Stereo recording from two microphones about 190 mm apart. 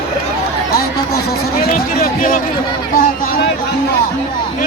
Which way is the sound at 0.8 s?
55° left (ahead or behind).